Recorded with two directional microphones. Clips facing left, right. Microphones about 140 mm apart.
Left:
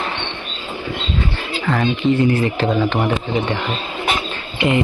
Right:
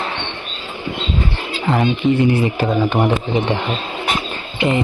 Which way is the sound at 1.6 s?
20° right (ahead or behind).